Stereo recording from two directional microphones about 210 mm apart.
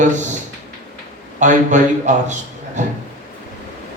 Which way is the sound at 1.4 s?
35° right (ahead or behind).